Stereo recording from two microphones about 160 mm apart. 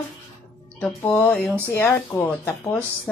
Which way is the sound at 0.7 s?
10° left (ahead or behind).